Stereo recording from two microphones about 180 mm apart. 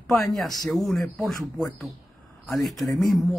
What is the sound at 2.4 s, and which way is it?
Speech, centre (ahead or behind).